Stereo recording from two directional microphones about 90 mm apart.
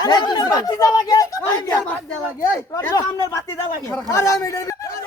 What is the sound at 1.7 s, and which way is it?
Speech, 15° left (ahead or behind).